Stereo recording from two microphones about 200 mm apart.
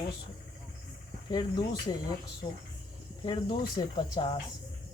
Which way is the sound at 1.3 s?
20° left (ahead or behind).